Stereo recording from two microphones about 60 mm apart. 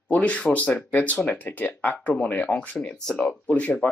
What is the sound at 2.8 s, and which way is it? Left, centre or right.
Speech, centre.